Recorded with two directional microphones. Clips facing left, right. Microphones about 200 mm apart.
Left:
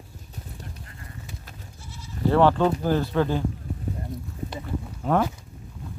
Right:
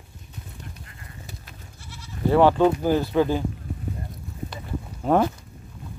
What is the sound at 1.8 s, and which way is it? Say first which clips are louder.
Goat: even; 70° right (ahead or behind).